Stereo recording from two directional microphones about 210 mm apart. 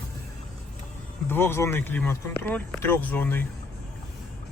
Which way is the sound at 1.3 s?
10° left (ahead or behind).